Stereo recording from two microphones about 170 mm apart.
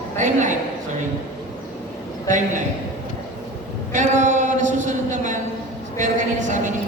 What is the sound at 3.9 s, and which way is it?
A man's voice, 45° right (ahead or behind).